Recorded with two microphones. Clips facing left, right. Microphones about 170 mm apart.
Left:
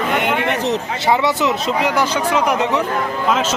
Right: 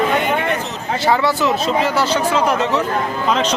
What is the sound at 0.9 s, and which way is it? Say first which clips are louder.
Speech: right 4 dB; 20° left (ahead or behind).